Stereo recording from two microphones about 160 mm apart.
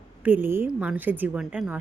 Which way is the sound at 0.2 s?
10° right (ahead or behind).